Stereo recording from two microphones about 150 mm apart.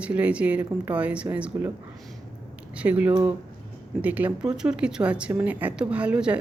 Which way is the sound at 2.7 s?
10° right (ahead or behind).